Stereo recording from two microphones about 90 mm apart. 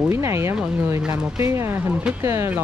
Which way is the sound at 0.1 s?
30° right (ahead or behind).